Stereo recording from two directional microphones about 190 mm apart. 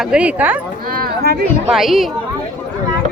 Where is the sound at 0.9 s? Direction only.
50° right (ahead or behind).